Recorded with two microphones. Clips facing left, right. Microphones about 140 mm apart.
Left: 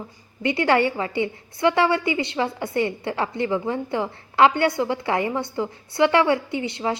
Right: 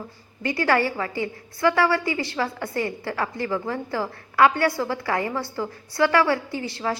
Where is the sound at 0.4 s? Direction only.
20° left (ahead or behind).